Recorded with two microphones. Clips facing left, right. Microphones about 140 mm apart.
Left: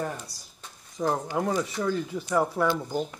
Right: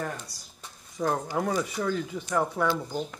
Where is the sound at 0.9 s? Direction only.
5° left (ahead or behind).